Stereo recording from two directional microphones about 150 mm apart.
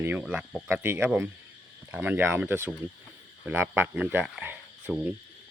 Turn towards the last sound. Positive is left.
turn(degrees=-10)  # may be behind; listen again after turning